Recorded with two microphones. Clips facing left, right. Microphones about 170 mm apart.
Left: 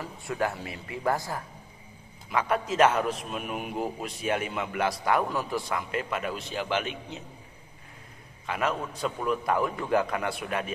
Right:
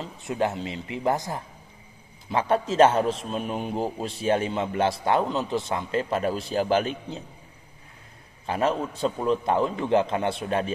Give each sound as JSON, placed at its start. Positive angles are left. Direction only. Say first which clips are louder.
{"t": 0.0, "sound": "a man's voice", "louder": "right 3 dB", "side_deg": -20}
{"t": 8.5, "sound": "a man's voice", "louder": "right 5 dB", "side_deg": -30}